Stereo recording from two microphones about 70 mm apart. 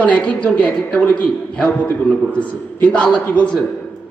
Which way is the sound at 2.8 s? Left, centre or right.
Centre.